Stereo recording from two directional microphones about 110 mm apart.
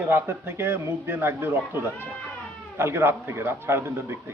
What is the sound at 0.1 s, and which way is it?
Speech, 20° right (ahead or behind).